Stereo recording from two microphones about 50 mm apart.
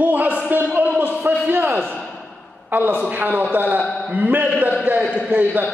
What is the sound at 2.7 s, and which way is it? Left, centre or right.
A man's voice, right.